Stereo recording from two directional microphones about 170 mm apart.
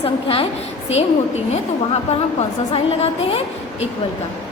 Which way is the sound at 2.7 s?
35° left (ahead or behind).